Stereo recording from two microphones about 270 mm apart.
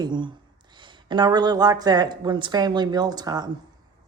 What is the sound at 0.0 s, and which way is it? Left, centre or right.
Speech, centre.